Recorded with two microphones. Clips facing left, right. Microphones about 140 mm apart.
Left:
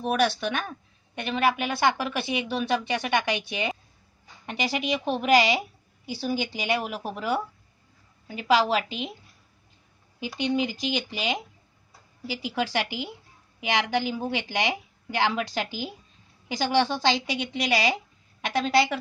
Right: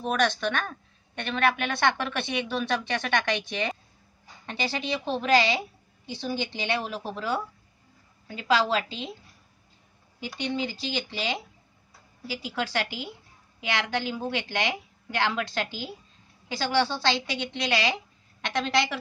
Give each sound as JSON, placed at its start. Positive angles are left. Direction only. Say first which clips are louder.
{"t": 0.0, "sound": "a woman's voice", "louder": "left 1 dB", "side_deg": 10}
{"t": 10.2, "sound": "a woman's voice", "louder": "left 4 dB", "side_deg": 15}